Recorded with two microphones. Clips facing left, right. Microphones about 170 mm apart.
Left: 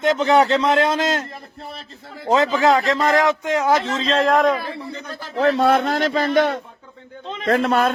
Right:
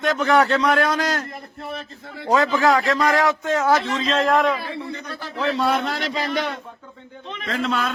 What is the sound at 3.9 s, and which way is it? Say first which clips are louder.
A man's voice: left 2 dB; 30° left (ahead or behind).